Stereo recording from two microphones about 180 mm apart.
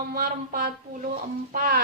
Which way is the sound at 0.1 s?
55° right (ahead or behind).